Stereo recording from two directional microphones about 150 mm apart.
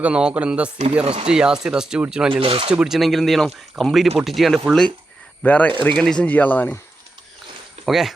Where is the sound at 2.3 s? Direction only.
40° right (ahead or behind).